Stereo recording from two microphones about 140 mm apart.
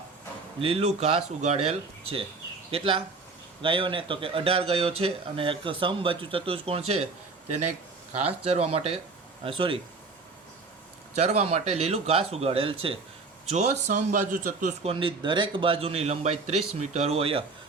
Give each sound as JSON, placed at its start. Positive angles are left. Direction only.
{"t": 0.6, "sound": "speech", "side_deg": -45}
{"t": 8.2, "sound": "speech", "side_deg": -45}
{"t": 11.1, "sound": "a man's voice", "side_deg": -55}
{"t": 14.8, "sound": "speech", "side_deg": -40}